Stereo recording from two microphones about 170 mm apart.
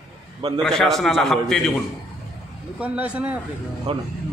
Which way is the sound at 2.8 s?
10° right (ahead or behind).